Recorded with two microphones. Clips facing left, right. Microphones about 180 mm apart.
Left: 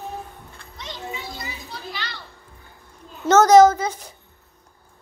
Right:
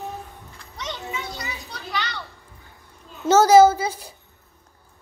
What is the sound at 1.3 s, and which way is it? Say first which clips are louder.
Children playing: even; 70° right (ahead or behind).